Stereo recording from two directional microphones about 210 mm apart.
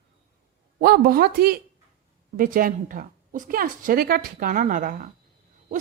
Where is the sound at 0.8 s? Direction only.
45° right (ahead or behind).